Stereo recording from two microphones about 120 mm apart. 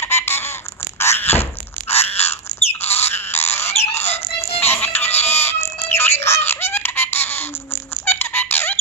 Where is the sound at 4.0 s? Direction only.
60° left (ahead or behind).